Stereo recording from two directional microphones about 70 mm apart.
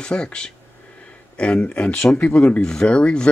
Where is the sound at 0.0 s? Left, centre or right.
Centre.